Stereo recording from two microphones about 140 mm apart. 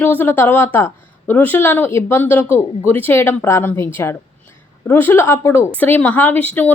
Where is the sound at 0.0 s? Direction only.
15° left (ahead or behind).